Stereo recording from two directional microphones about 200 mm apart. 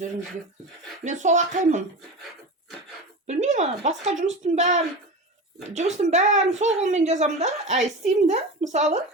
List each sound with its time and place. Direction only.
1.0 s a woman's voice: 35° right (ahead or behind)
3.2 s a woman's voice: 35° right (ahead or behind)